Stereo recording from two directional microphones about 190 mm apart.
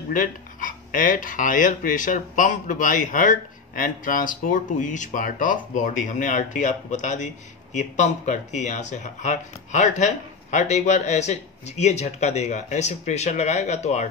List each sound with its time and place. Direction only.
0.1 s speech: 45° left (ahead or behind)